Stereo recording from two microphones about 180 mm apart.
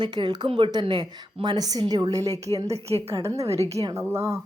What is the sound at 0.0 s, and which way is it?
A woman's voice, 25° right (ahead or behind).